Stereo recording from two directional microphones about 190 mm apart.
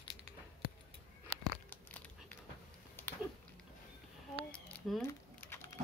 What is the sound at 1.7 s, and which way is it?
Crumpling, 10° left (ahead or behind).